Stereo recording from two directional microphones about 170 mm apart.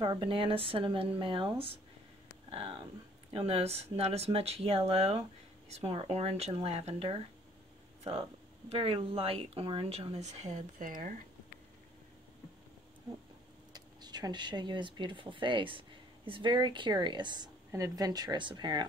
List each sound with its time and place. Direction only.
0.0 s speech: 30° right (ahead or behind); by 11.1 s 55° right (ahead or behind)
13.7 s speech: 25° right (ahead or behind)